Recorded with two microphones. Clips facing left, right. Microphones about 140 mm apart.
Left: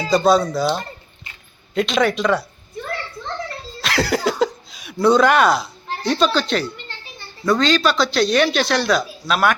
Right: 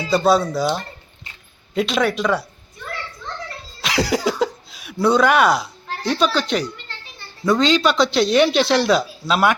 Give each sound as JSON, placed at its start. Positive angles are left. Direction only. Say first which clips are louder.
{"t": 0.3, "sound": "a child's voice", "louder": "even", "side_deg": -10}
{"t": 3.8, "sound": "cough", "louder": "even", "side_deg": -10}
{"t": 4.3, "sound": "a sound", "louder": "left 1 dB", "side_deg": -10}
{"t": 6.0, "sound": "a child's voice", "louder": "left 1 dB", "side_deg": -10}